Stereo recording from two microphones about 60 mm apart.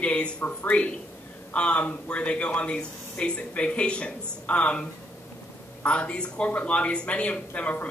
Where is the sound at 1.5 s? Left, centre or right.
Left.